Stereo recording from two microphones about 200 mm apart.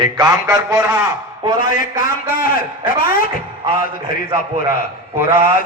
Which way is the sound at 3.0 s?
45° left (ahead or behind).